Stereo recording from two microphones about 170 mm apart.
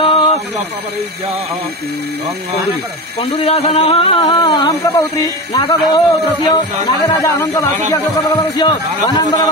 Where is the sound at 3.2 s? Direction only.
35° left (ahead or behind).